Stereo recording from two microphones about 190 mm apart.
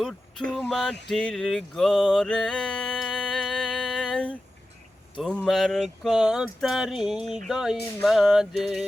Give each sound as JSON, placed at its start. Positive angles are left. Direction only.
{"t": 0.0, "sound": "speech", "side_deg": 0}
{"t": 1.1, "sound": "a sound", "side_deg": 5}
{"t": 5.4, "sound": "speech", "side_deg": 0}